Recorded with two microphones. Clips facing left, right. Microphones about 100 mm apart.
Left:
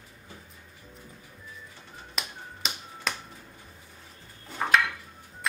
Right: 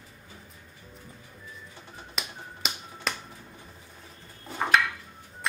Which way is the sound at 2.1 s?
Centre (ahead or behind).